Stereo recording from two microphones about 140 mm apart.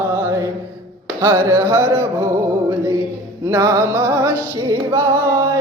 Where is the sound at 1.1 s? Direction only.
20° right (ahead or behind).